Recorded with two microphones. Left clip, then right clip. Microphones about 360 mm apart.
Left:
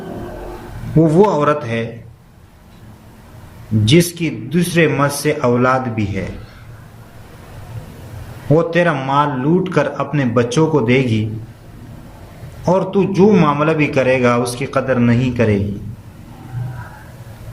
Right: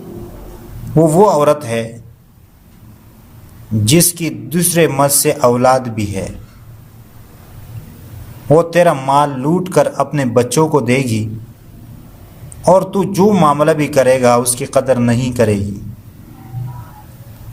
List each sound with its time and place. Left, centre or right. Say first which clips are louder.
1.0 s a man's voice: right 3 dB; right
3.8 s a man's voice: right 1 dB; right
8.5 s a man's voice: right 4 dB; right
12.6 s a man's voice: right 4 dB; right